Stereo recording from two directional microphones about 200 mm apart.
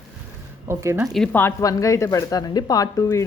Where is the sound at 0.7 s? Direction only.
15° right (ahead or behind).